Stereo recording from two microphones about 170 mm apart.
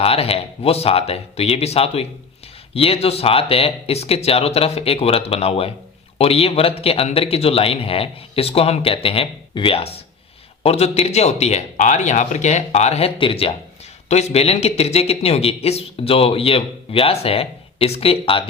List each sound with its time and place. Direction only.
0.0 s speech: 35° left (ahead or behind)